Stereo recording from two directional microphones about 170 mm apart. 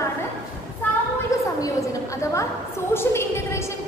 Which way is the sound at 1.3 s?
15° left (ahead or behind).